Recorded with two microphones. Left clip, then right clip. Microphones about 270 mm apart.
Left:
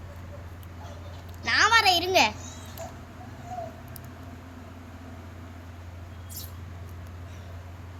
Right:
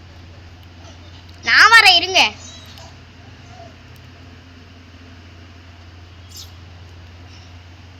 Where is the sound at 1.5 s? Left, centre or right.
Centre.